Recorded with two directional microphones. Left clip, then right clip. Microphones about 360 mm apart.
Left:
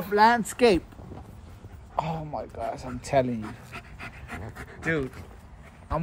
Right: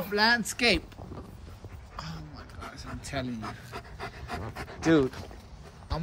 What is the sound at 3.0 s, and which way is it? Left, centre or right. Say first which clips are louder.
Speech: left 12 dB; centre.